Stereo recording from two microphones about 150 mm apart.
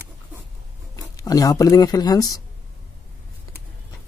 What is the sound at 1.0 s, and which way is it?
Speech, 25° left (ahead or behind).